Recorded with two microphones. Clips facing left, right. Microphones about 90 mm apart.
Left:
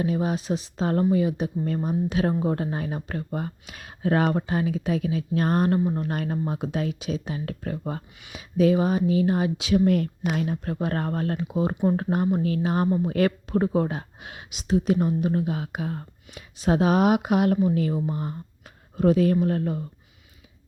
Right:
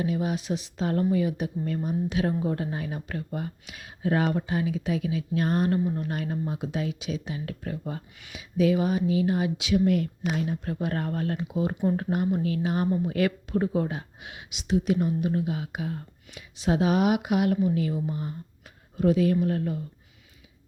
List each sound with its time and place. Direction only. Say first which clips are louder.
0.0 s speech: left 2 dB; 40° left (ahead or behind)